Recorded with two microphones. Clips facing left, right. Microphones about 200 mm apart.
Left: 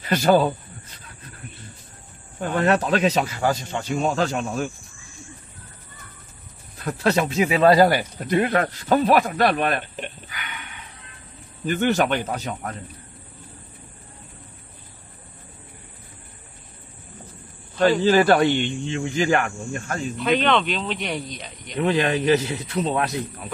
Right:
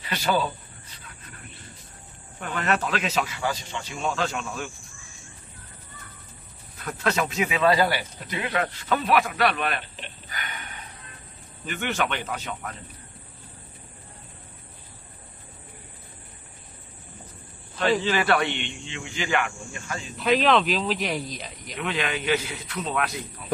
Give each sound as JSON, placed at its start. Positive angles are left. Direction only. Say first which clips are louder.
{"t": 0.1, "sound": "speech", "louder": "left 8 dB", "side_deg": 45}
{"t": 2.4, "sound": "speech", "louder": "left 6 dB", "side_deg": 35}
{"t": 6.8, "sound": "speech", "louder": "left 5 dB", "side_deg": 35}
{"t": 10.3, "sound": "a sound", "louder": "even", "side_deg": -40}
{"t": 11.6, "sound": "speech", "louder": "left 8 dB", "side_deg": 40}
{"t": 18.0, "sound": "speech", "louder": "left 7 dB", "side_deg": 40}
{"t": 20.2, "sound": "speech", "louder": "even", "side_deg": 0}
{"t": 21.7, "sound": "speech", "louder": "left 8 dB", "side_deg": 35}